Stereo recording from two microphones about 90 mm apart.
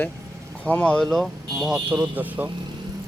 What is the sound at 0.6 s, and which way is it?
Speech, 15° left (ahead or behind).